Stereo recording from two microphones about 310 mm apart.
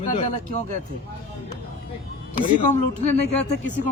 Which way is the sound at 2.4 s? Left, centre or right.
Left.